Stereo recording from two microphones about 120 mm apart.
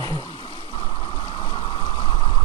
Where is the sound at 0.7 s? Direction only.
45° left (ahead or behind).